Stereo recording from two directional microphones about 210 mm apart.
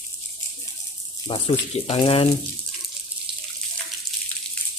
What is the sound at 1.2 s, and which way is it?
Speech, 30° left (ahead or behind).